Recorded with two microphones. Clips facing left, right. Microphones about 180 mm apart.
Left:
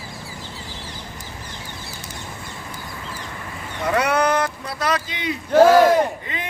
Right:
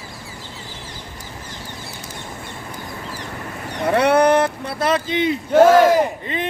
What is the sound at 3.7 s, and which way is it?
Vehicle, 35° right (ahead or behind).